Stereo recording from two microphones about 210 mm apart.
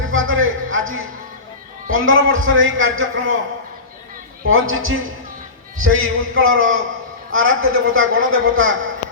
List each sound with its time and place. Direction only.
0.1 s a man's voice: 75° right (ahead or behind)
4.4 s a man's voice: 75° right (ahead or behind)